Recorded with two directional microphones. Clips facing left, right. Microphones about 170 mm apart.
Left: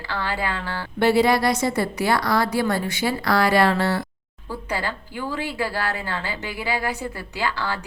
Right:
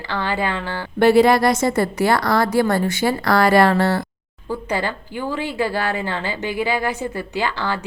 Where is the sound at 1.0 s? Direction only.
50° right (ahead or behind).